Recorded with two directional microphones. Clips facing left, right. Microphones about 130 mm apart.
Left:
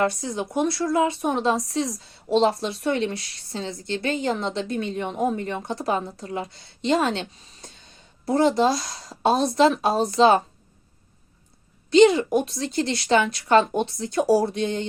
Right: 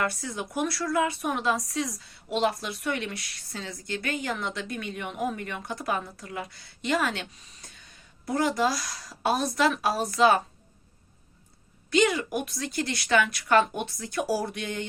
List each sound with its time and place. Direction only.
0.0 s speech: 20° left (ahead or behind)
11.9 s speech: 25° left (ahead or behind)